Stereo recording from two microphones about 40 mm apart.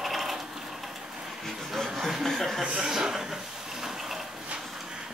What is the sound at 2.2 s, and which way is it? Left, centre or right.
Chuckle, centre.